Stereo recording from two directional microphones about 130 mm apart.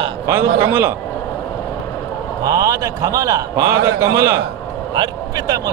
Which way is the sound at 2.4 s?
30° right (ahead or behind).